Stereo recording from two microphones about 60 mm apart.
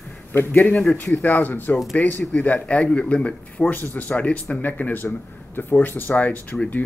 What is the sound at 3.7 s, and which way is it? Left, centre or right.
Speech, left.